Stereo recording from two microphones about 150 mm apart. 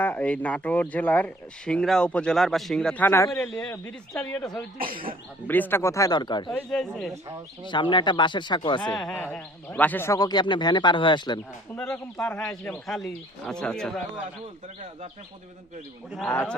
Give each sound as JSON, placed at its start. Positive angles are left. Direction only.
{"t": 0.0, "sound": "speech", "side_deg": 10}
{"t": 6.5, "sound": "speech", "side_deg": 5}
{"t": 7.1, "sound": "speech", "side_deg": -20}
{"t": 7.6, "sound": "speech", "side_deg": 30}
{"t": 9.0, "sound": "speech", "side_deg": 5}
{"t": 11.8, "sound": "speech", "side_deg": 5}
{"t": 16.3, "sound": "speech", "side_deg": 10}